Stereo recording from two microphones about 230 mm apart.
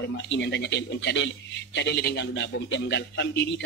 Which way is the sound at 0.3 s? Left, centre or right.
Left.